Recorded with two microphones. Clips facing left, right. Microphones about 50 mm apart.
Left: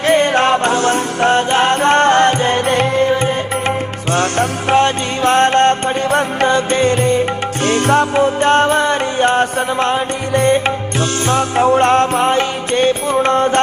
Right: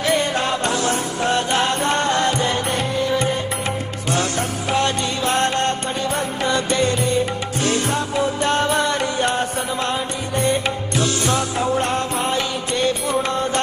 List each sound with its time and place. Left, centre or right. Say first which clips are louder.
0.0 s music: left 7 dB; left
3.1 s music: left 5 dB; left
4.1 s music: left 6 dB; left
6.5 s music: left 3 dB; left
8.2 s music: left 7 dB; left